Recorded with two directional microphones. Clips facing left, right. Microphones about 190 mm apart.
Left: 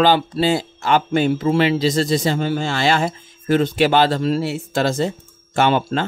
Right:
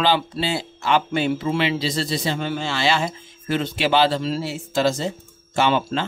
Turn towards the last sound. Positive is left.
turn(degrees=50)  # may be behind; listen again after turning